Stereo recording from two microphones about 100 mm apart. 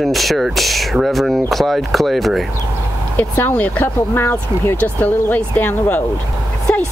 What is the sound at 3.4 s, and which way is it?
Speech, 15° left (ahead or behind).